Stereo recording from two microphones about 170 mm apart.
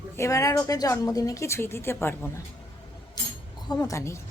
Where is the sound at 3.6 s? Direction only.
25° left (ahead or behind).